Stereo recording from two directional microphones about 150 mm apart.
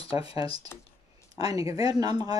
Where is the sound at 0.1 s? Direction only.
40° left (ahead or behind).